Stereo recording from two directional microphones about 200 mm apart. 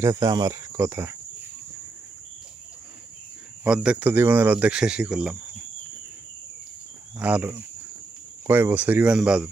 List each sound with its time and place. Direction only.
0.0 s speech: 20° right (ahead or behind)
3.6 s speech: 5° right (ahead or behind)
7.2 s speech: 5° right (ahead or behind)